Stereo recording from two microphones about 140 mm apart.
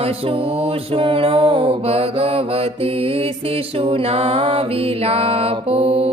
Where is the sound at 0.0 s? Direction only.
45° right (ahead or behind).